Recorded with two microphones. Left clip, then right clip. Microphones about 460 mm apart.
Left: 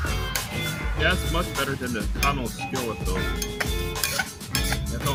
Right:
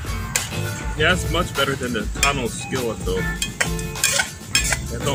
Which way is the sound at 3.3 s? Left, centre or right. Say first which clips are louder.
Right 5 dB; left.